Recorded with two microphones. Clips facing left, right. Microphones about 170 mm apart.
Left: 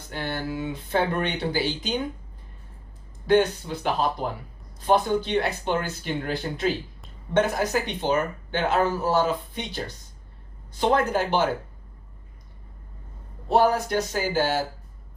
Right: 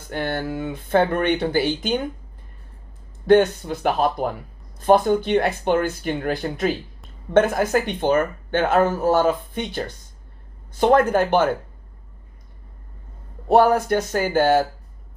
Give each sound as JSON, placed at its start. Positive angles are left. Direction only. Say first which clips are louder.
{"t": 0.1, "sound": "speech", "louder": "right 5 dB", "side_deg": -55}
{"t": 3.2, "sound": "speech", "louder": "right 5 dB", "side_deg": -55}
{"t": 13.5, "sound": "speech", "louder": "right 5 dB", "side_deg": -55}